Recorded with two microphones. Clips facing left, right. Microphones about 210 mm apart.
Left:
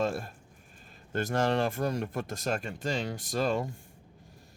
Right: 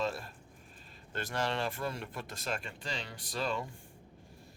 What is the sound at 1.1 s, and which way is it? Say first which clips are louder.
Speech: left 7 dB; 45° left (ahead or behind).